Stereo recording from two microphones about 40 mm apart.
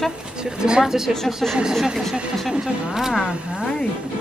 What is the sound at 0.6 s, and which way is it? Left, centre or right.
A woman's voice, centre.